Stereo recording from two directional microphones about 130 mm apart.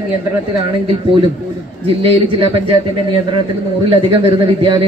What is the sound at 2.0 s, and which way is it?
Speech, 50° right (ahead or behind).